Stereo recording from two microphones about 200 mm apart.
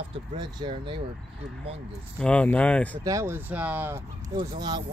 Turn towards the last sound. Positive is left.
turn(degrees=-20)  # may be behind; listen again after turning